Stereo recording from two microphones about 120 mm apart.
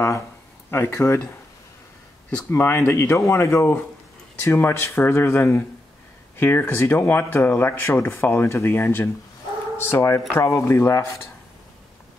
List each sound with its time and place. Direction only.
0.7 s speech: 20° left (ahead or behind)
2.3 s speech: 15° left (ahead or behind)